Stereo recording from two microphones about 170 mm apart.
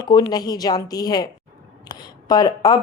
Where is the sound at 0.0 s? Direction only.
25° left (ahead or behind).